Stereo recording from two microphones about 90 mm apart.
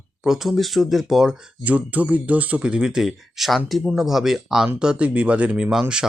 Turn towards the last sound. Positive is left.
turn(degrees=-10)  # may be behind; listen again after turning